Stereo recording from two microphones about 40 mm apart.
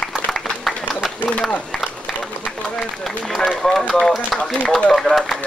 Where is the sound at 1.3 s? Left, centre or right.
Left.